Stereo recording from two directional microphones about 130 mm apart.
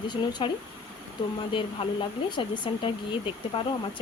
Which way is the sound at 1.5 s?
40° left (ahead or behind).